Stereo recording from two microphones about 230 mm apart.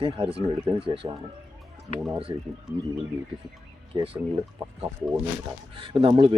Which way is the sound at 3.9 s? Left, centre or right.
Right.